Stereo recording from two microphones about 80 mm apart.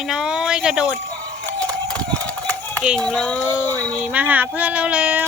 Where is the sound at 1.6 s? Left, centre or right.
Centre.